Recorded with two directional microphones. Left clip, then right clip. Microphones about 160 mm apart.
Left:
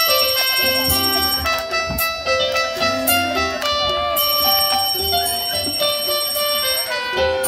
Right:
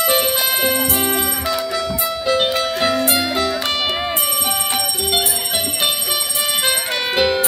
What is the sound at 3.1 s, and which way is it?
Music, 30° right (ahead or behind).